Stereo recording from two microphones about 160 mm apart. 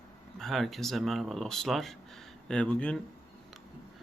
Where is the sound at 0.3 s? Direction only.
Centre (ahead or behind).